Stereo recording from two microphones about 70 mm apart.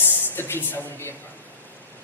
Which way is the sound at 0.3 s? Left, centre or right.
Left.